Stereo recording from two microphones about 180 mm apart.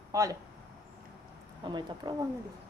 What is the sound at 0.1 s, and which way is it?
Speech, 20° right (ahead or behind).